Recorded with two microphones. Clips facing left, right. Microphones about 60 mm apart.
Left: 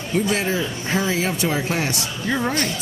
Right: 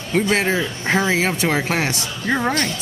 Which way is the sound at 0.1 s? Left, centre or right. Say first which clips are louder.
Right 3 dB; right.